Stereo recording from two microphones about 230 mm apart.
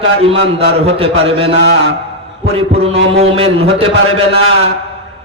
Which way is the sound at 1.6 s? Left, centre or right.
Right.